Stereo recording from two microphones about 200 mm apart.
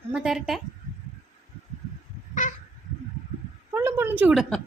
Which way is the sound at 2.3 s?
40° left (ahead or behind).